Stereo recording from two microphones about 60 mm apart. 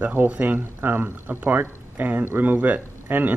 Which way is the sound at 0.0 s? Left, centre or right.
Right.